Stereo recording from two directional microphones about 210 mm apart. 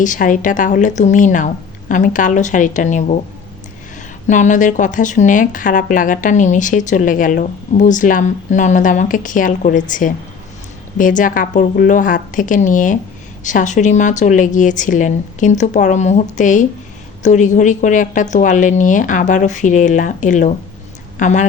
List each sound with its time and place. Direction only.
0.0 s speech: 40° left (ahead or behind)
4.3 s speech: 35° left (ahead or behind)